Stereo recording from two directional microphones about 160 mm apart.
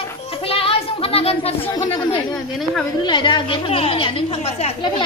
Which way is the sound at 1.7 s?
25° left (ahead or behind).